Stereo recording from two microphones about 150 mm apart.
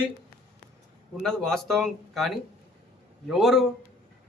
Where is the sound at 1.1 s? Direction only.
5° left (ahead or behind).